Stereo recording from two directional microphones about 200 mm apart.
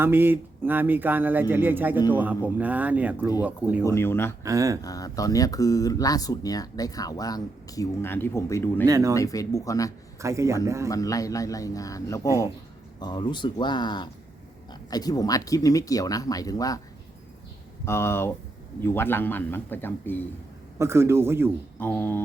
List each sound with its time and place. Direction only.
0.0 s speech: 10° right (ahead or behind)
3.8 s speech: 10° left (ahead or behind)
4.4 s speech: 15° right (ahead or behind)
4.8 s speech: 15° left (ahead or behind)
8.9 s speech: 15° right (ahead or behind)
9.1 s speech: 15° left (ahead or behind)
10.2 s speech: 15° right (ahead or behind)
10.8 s speech: 15° left (ahead or behind)
17.8 s speech: 10° left (ahead or behind)
20.7 s speech: 15° right (ahead or behind)
21.8 s speech: 10° left (ahead or behind)